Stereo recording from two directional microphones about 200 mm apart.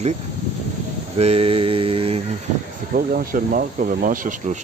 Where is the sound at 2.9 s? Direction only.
45° right (ahead or behind).